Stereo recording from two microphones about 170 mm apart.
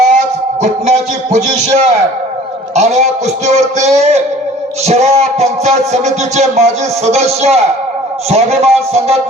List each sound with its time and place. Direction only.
0.9 s music: 40° right (ahead or behind)